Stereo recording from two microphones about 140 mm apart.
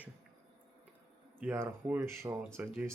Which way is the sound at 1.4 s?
15° right (ahead or behind).